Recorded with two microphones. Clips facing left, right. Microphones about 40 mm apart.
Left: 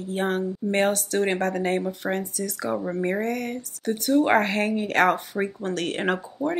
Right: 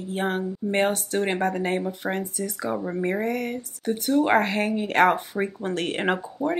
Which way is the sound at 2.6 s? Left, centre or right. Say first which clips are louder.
Left 1 dB; centre.